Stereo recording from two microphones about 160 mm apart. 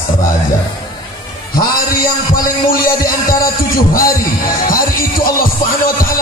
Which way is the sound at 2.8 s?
65° left (ahead or behind).